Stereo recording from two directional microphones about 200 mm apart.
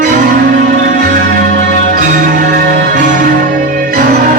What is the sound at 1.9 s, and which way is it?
Music, 40° right (ahead or behind).